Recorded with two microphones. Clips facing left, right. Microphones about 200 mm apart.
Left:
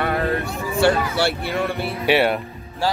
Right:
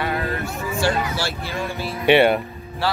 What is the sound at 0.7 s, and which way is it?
Speech, 60° left (ahead or behind).